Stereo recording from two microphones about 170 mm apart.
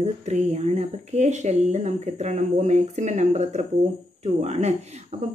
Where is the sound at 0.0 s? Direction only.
40° right (ahead or behind).